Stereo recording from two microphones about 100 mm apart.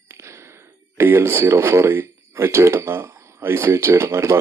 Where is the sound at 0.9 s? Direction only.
25° right (ahead or behind).